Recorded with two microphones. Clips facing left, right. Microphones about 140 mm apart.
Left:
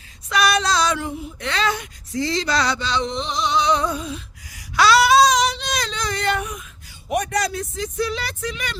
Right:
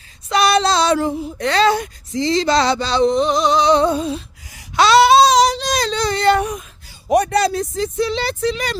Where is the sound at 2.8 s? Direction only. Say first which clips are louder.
Right 9 dB; 35° right (ahead or behind).